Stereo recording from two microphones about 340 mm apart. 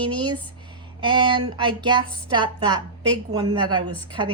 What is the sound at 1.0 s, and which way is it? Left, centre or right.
Speech, centre.